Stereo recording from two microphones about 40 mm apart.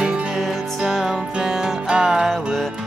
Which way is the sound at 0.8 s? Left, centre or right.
Centre.